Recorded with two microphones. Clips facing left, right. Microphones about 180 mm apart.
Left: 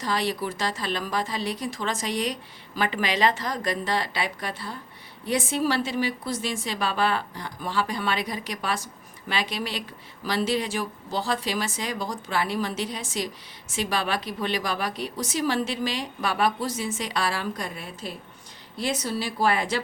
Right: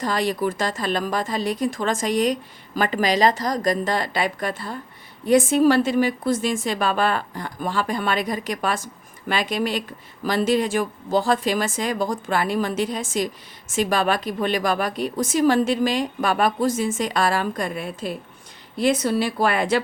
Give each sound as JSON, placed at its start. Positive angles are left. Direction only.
{"t": 0.0, "sound": "speech", "side_deg": -50}